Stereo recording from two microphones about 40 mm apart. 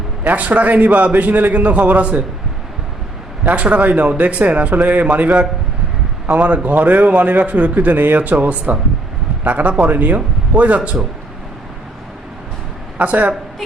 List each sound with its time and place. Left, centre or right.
0.3 s a man's voice: right
3.4 s a man's voice: right
13.0 s a man's voice: right